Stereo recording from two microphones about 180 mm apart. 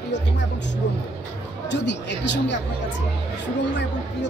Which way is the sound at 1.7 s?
75° left (ahead or behind).